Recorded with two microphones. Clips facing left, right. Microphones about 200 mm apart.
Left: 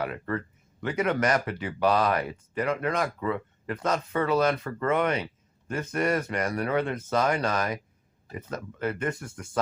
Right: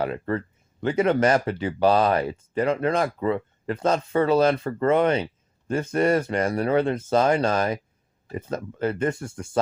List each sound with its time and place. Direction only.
0.0 s speech: 30° right (ahead or behind)